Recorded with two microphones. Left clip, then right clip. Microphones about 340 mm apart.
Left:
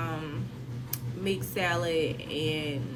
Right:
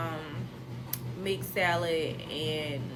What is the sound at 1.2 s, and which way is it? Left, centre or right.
Speech, centre.